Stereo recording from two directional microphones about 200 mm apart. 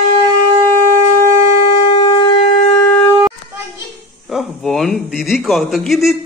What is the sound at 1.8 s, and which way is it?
Shofar, 25° left (ahead or behind).